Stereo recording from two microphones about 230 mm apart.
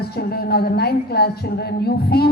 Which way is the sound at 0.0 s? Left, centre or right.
Left.